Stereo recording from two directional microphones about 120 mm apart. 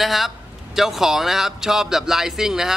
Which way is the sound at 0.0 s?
Centre (ahead or behind).